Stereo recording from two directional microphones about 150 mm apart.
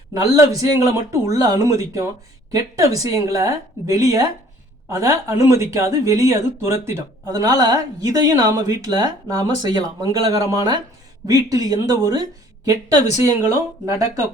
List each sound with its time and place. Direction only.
0.1 s speech: 20° right (ahead or behind)